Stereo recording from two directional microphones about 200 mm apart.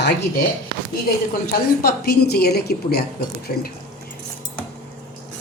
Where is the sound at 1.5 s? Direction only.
50° left (ahead or behind).